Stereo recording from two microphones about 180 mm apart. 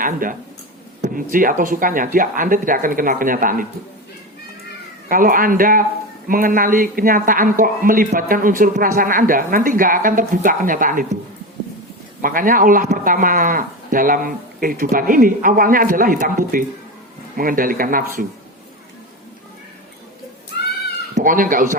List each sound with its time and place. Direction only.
0.0 s a man's voice: 50° right (ahead or behind)
5.0 s a man's voice: 50° right (ahead or behind)
12.2 s a man's voice: 50° right (ahead or behind)
21.2 s a man's voice: 50° right (ahead or behind)